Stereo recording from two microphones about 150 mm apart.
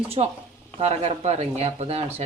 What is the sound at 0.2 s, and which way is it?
Speech, 40° right (ahead or behind).